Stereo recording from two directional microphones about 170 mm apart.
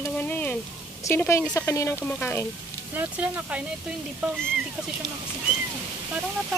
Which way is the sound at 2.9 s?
10° right (ahead or behind).